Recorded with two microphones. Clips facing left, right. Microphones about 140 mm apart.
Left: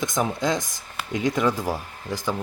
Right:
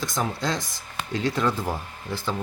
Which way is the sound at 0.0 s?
20° left (ahead or behind).